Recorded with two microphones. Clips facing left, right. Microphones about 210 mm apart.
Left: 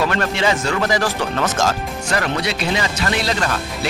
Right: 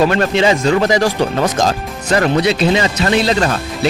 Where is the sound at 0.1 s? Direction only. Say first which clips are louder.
Right 6 dB; 20° right (ahead or behind).